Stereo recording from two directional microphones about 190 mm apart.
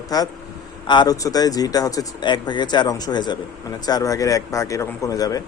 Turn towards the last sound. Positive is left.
turn(degrees=20)  # may be behind; listen again after turning